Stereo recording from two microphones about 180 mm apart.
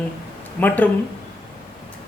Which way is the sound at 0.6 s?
10° left (ahead or behind).